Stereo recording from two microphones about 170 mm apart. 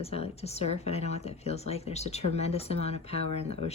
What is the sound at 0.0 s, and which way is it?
Speech, 35° left (ahead or behind).